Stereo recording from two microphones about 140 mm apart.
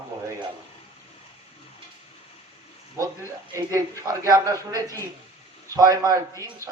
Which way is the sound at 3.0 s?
20° right (ahead or behind).